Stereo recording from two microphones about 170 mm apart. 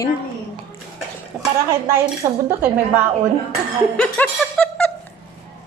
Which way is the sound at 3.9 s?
5° left (ahead or behind).